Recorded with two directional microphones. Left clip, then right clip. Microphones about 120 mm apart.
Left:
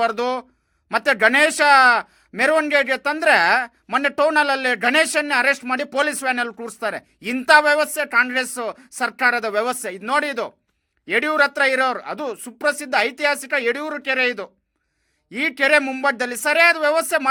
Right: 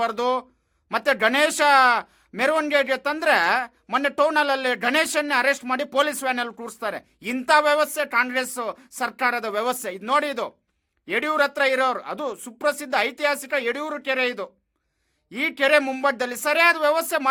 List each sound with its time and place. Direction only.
0.0 s speech: 25° left (ahead or behind)